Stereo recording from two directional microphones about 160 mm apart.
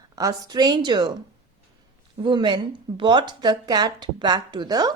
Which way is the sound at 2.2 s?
30° right (ahead or behind).